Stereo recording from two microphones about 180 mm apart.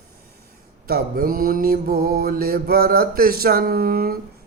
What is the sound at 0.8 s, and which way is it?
Mantra, 55° right (ahead or behind).